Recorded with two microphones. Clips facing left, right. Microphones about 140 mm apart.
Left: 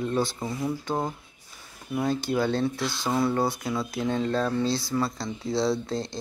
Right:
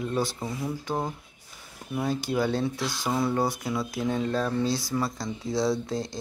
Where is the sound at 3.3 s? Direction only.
15° right (ahead or behind).